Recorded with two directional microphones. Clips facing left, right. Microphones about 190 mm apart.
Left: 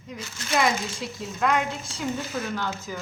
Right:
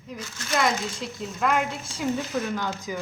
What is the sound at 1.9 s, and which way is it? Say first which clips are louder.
Speech: right 3 dB; 10° right (ahead or behind).